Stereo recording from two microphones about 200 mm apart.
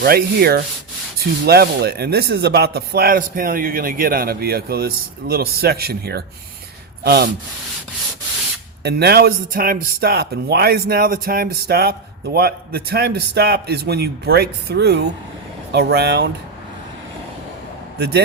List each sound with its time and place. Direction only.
0.0 s speech: 50° right (ahead or behind)
8.8 s speech: 55° right (ahead or behind)
17.9 s speech: 55° right (ahead or behind)